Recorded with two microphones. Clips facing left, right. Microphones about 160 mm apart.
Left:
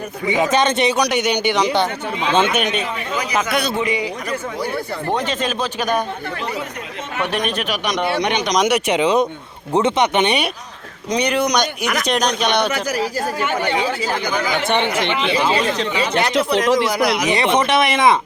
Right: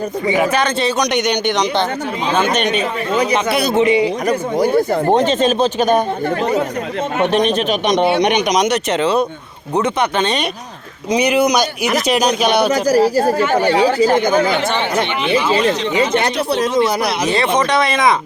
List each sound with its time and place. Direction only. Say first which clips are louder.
0.3 s speech: left 1 dB; 20° left (ahead or behind)
1.1 s a man's voice: right 1 dB; 5° left (ahead or behind)
3.8 s speech: right 8 dB; 25° right (ahead or behind)
4.3 s speech: right 9 dB; 45° right (ahead or behind)
5.1 s speech: right 6 dB; 25° right (ahead or behind)
7.2 s speech: right 6 dB; 25° right (ahead or behind)
8.5 s a man's voice: right 1 dB; 10° left (ahead or behind)
11.1 s speech: right 4 dB; 5° right (ahead or behind)
12.7 s speech: right 9 dB; 40° right (ahead or behind)
14.7 s speech: right 1 dB; 75° left (ahead or behind)
16.3 s speech: left 1 dB; 90° left
16.7 s speech: right 1 dB; 25° right (ahead or behind)
17.6 s speech: right 1 dB; 20° left (ahead or behind)